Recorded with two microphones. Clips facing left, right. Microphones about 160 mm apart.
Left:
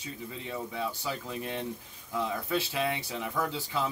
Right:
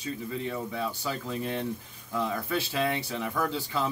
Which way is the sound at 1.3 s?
15° left (ahead or behind).